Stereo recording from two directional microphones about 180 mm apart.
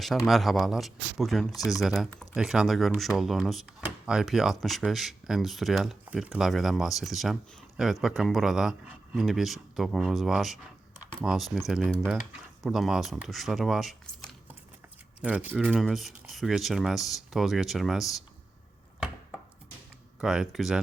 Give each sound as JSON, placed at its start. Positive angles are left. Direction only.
{"t": 0.0, "sound": "speech", "side_deg": 0}
{"t": 20.2, "sound": "speech", "side_deg": 0}